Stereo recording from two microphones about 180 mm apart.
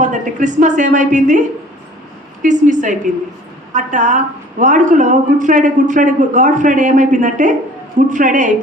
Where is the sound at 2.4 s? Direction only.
45° right (ahead or behind).